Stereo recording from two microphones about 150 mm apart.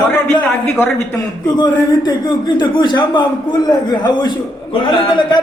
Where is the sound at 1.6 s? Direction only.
30° left (ahead or behind).